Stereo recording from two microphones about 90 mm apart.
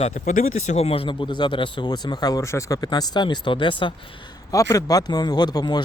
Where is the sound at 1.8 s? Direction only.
50° left (ahead or behind).